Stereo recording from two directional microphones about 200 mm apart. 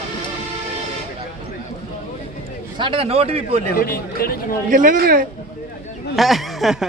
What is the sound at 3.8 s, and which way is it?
Speech, 45° left (ahead or behind).